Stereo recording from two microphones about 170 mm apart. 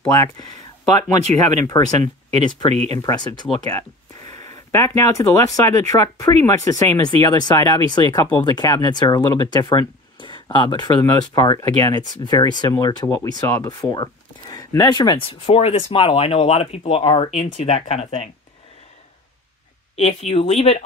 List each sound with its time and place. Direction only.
0.1 s speech: 20° left (ahead or behind)
1.2 s speech: 45° right (ahead or behind)
2.7 s speech: 40° right (ahead or behind)
3.0 s speech: 25° left (ahead or behind)
20.0 s speech: 35° left (ahead or behind)